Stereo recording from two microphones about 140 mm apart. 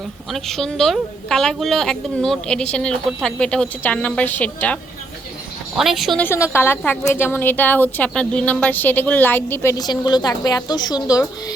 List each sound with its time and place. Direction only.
0.3 s a woman's voice: centre (ahead or behind)
5.7 s a woman's voice: centre (ahead or behind)
6.2 s speech: 20° left (ahead or behind)